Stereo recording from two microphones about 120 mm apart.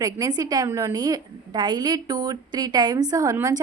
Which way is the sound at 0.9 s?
35° right (ahead or behind).